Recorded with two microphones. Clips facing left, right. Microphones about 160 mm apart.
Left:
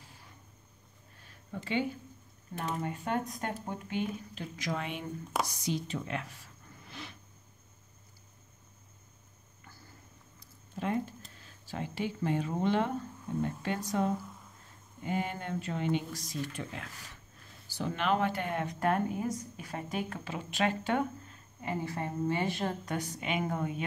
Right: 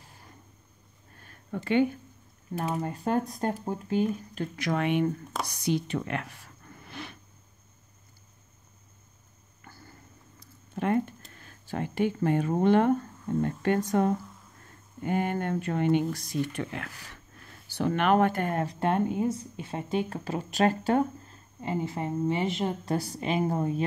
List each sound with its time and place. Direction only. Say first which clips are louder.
1.2 s a sound: right 6 dB; 55° right (ahead or behind)
2.8 s speech: right 5 dB; 35° right (ahead or behind)
4.4 s speech: right 8 dB; 65° right (ahead or behind)
5.5 s a sound: right 6 dB; 65° right (ahead or behind)
10.8 s speech: right 6 dB; 60° right (ahead or behind); by 22.9 s 20° right (ahead or behind)
22.9 s speech: right 5 dB; 35° right (ahead or behind)